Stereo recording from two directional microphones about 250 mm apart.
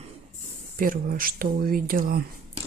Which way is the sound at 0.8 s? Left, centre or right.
Right.